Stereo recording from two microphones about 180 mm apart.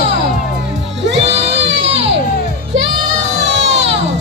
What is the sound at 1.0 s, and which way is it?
Music, 75° right (ahead or behind).